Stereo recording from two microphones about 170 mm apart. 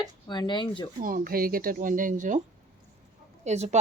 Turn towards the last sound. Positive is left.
turn(degrees=-40)  # may be behind; listen again after turning